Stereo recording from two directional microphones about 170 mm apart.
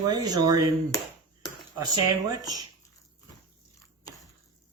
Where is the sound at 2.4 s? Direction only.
20° right (ahead or behind).